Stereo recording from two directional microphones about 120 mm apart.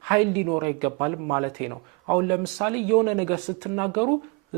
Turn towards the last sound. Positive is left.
turn(degrees=-20)  # may be behind; listen again after turning